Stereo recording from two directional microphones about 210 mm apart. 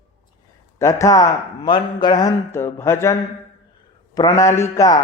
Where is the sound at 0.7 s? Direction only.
15° left (ahead or behind).